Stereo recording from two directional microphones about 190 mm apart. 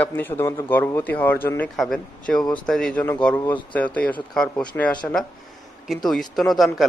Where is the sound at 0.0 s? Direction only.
10° left (ahead or behind).